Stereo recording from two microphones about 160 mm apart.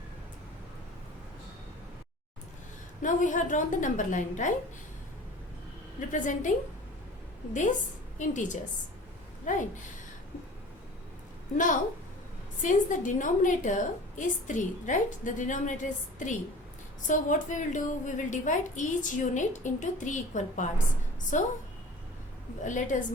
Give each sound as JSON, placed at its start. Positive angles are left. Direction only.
{"t": 3.0, "sound": "a woman's voice", "side_deg": 50}
{"t": 6.1, "sound": "a woman's voice", "side_deg": 55}
{"t": 8.2, "sound": "a woman's voice", "side_deg": 50}
{"t": 11.5, "sound": "a woman's voice", "side_deg": 55}
{"t": 22.6, "sound": "a woman's voice", "side_deg": 50}